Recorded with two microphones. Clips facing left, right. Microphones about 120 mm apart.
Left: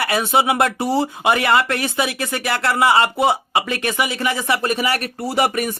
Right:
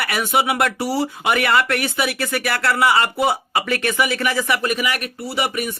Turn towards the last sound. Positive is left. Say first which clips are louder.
# left 4 dB
turn(degrees=45)  # may be behind; listen again after turning